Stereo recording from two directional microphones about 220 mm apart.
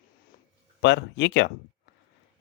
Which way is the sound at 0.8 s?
55° left (ahead or behind).